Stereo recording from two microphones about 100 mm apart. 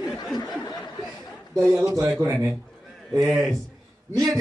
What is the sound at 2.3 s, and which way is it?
A man's voice, centre (ahead or behind).